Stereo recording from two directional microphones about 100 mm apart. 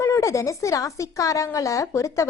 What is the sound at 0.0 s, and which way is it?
A woman's voice, 30° left (ahead or behind).